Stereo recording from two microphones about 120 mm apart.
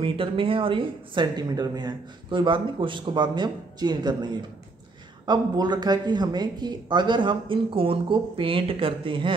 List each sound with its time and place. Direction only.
0.0 s speech: 50° right (ahead or behind)